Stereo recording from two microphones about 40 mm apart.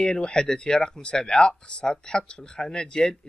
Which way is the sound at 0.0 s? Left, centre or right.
Left.